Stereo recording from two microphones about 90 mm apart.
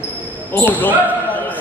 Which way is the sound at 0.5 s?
20° left (ahead or behind).